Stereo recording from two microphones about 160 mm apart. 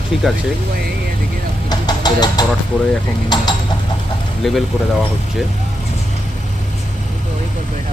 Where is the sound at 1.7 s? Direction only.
25° left (ahead or behind).